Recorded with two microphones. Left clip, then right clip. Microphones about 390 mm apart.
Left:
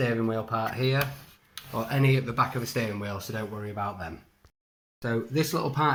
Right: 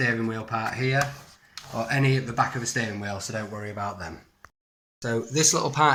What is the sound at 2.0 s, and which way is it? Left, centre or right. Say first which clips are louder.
Speech: left 2 dB; centre.